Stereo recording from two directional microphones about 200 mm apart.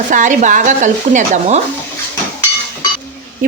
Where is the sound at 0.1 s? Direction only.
40° right (ahead or behind).